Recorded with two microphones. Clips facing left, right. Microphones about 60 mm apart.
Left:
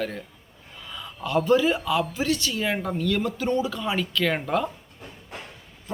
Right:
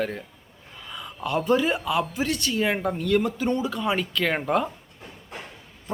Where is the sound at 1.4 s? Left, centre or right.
Right.